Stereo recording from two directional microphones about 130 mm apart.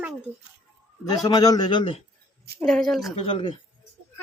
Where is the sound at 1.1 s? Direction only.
30° left (ahead or behind).